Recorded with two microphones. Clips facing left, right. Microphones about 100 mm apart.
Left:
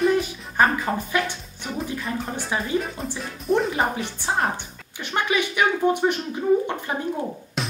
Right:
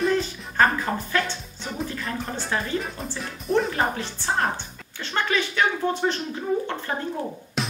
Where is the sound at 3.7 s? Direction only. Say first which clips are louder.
Left 1 dB; 15° left (ahead or behind).